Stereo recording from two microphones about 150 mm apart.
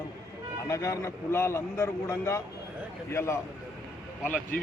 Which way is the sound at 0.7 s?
20° left (ahead or behind).